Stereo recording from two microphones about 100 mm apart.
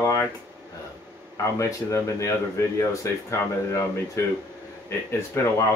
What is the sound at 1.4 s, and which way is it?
Speech, 30° left (ahead or behind).